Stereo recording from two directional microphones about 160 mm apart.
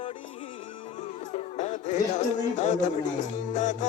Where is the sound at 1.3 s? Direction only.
50° left (ahead or behind).